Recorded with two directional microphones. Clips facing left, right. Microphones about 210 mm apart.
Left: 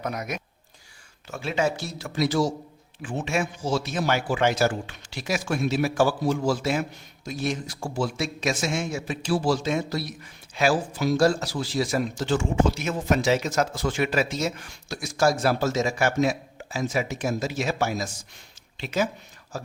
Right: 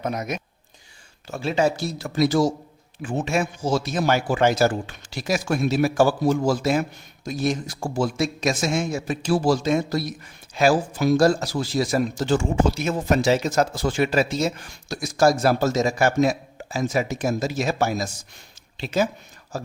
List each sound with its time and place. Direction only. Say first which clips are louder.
0.0 s speech: right 3 dB; 25° right (ahead or behind)
1.3 s a man's voice: right 4 dB; 35° right (ahead or behind)